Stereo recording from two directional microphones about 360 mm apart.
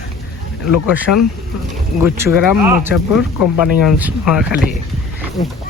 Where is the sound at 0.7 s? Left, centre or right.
Centre.